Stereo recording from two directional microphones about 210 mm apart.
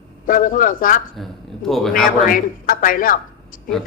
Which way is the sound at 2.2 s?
40° left (ahead or behind).